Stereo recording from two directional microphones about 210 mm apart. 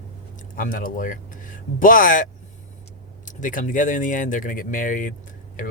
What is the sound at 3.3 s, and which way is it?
Speech, 40° left (ahead or behind).